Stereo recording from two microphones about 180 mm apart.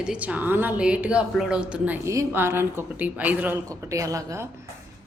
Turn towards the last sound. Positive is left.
turn(degrees=-15)  # may be behind; listen again after turning